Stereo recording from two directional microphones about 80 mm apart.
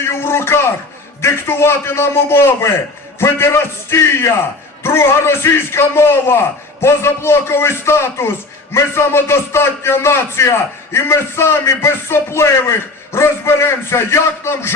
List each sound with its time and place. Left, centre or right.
0.0 s a man's voice: left